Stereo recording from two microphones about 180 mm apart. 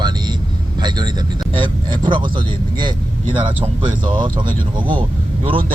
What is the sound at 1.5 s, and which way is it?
Speech, 25° right (ahead or behind).